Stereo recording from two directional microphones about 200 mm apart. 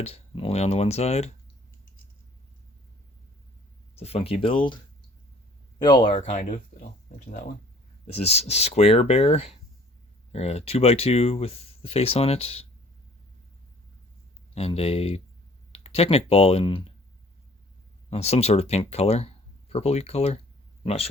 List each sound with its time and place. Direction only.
0.0 s speech: 30° left (ahead or behind)
3.9 s speech: 30° left (ahead or behind)
5.8 s speech: 20° left (ahead or behind)
6.1 s speech: 35° left (ahead or behind)
8.0 s speech: 30° left (ahead or behind)
14.5 s speech: 30° left (ahead or behind)
18.1 s speech: 30° left (ahead or behind)